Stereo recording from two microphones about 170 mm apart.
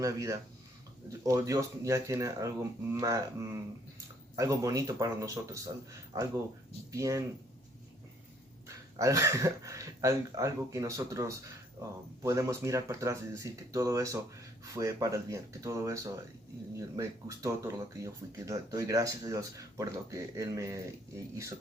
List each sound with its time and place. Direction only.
0.0 s speech: 20° right (ahead or behind)
8.6 s speech: 20° right (ahead or behind)